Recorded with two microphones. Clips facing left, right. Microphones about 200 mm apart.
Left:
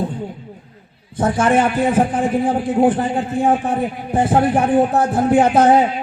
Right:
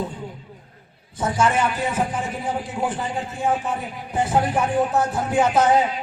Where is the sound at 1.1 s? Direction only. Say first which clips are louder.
Left 6 dB; 55° left (ahead or behind).